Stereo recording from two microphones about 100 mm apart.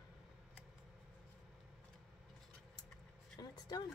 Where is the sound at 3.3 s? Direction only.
40° left (ahead or behind).